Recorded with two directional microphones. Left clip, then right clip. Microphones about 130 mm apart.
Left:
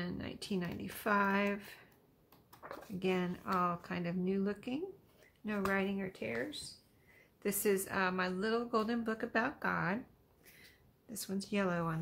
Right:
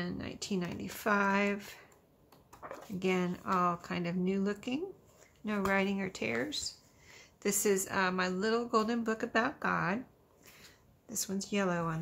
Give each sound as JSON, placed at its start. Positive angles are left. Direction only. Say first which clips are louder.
{"t": 0.0, "sound": "speech", "louder": "right 3 dB", "side_deg": -15}
{"t": 3.0, "sound": "a woman's voice", "louder": "right 3 dB", "side_deg": -20}
{"t": 7.4, "sound": "a woman's voice", "louder": "right 3 dB", "side_deg": -15}
{"t": 11.1, "sound": "speech", "louder": "right 4 dB", "side_deg": -20}